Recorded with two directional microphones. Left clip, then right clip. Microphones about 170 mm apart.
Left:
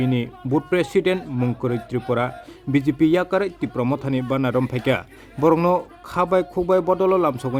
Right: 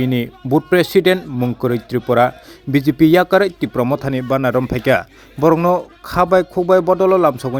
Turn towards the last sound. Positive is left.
turn(degrees=-20)  # may be behind; listen again after turning